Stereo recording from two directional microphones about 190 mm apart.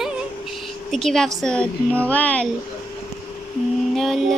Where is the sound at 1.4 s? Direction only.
5° left (ahead or behind).